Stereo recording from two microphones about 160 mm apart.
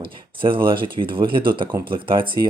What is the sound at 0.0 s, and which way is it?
Speech, 35° right (ahead or behind).